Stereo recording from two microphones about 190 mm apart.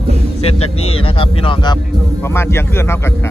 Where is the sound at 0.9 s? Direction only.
30° left (ahead or behind).